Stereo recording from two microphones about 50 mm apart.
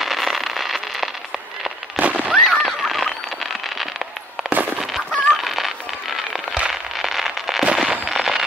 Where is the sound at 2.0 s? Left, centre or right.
Right.